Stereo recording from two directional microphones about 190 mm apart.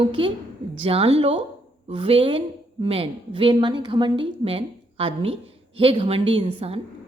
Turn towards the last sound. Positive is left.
turn(degrees=-30)  # may be behind; listen again after turning